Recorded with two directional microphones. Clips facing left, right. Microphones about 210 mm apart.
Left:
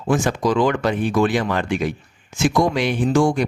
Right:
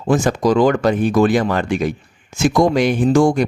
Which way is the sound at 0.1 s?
40° right (ahead or behind).